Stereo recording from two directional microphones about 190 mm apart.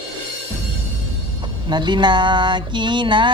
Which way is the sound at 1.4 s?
25° right (ahead or behind).